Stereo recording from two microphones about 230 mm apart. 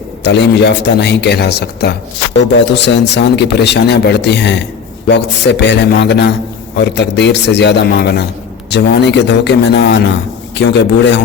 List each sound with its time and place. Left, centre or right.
0.3 s a man's voice: left